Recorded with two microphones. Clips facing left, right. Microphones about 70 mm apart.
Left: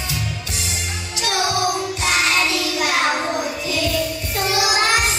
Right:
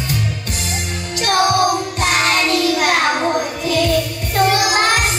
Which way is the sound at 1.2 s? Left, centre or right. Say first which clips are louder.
Right 6 dB; right.